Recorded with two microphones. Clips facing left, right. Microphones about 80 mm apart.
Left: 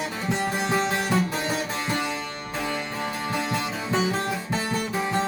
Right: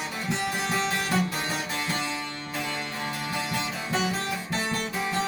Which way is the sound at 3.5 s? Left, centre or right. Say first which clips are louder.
Left 3 dB; left.